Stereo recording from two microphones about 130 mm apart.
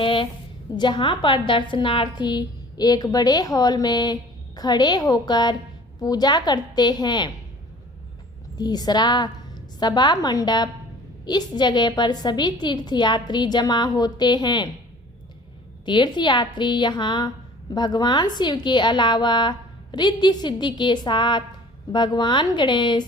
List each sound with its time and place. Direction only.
0.0 s a sound: 40° left (ahead or behind)
0.8 s a woman's voice: 40° left (ahead or behind)
8.5 s a woman's voice: 30° left (ahead or behind)
15.9 s a woman's voice: 35° left (ahead or behind)